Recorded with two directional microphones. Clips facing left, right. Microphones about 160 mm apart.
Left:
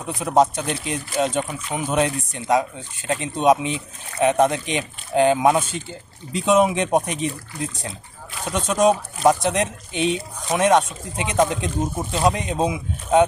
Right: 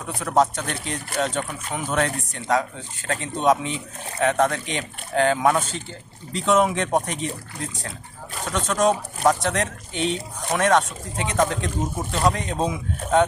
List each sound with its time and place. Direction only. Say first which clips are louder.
0.0 s speech: left 3 dB; 15° left (ahead or behind)